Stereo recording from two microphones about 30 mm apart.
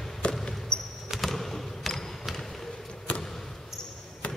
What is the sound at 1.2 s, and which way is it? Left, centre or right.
Basketball bounce, centre.